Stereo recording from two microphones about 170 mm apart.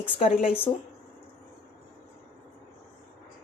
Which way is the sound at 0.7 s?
20° left (ahead or behind).